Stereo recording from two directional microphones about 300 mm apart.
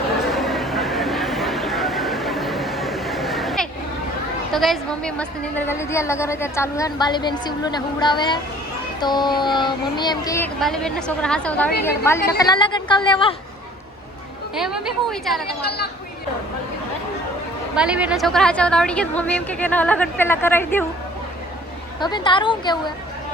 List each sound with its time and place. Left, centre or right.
0.2 s a sound: centre
4.5 s a woman's voice: centre
14.5 s a woman's voice: centre
15.4 s a woman's voice: left
17.7 s a woman's voice: centre
22.0 s a woman's voice: centre